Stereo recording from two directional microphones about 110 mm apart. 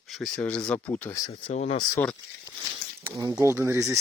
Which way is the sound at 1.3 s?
70° left (ahead or behind).